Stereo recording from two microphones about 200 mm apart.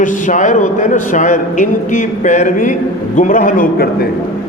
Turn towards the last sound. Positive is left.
turn(degrees=40)  # may be behind; listen again after turning